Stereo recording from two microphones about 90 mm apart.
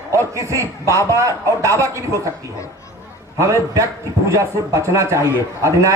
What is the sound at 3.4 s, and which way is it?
A man's voice, 35° right (ahead or behind).